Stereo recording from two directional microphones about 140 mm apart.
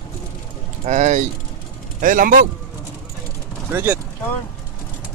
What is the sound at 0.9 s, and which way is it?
Speech, 55° right (ahead or behind).